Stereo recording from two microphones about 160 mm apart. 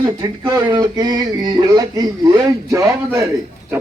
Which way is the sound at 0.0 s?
25° right (ahead or behind).